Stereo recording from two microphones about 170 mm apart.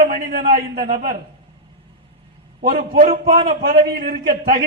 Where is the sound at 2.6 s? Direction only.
60° right (ahead or behind).